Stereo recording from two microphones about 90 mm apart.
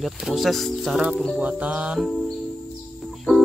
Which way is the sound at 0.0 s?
Centre (ahead or behind).